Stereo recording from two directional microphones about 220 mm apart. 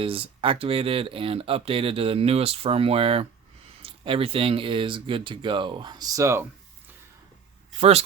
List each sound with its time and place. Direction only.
0.0 s speech: 25° right (ahead or behind)
7.8 s speech: 30° right (ahead or behind)